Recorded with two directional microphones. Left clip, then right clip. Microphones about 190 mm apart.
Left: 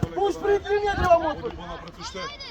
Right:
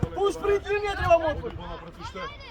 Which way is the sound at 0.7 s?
45° right (ahead or behind).